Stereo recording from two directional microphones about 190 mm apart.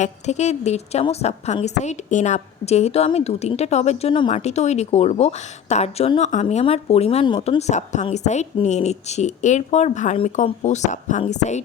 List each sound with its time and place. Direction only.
0.0 s a woman's voice: 35° left (ahead or behind)